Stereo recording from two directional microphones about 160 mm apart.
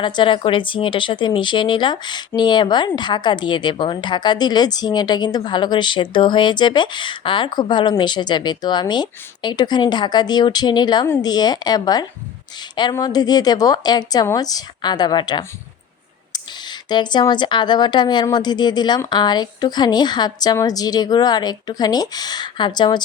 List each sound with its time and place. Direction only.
0.0 s speech: 30° left (ahead or behind)